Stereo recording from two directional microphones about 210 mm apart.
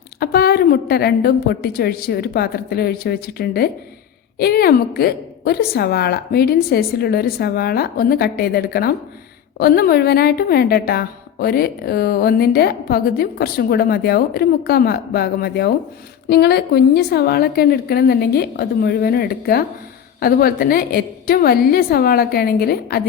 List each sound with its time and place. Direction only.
0.2 s a woman's voice: 50° left (ahead or behind)